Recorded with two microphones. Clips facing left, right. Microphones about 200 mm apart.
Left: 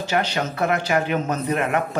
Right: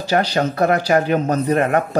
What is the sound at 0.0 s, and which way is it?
Speech, 35° right (ahead or behind).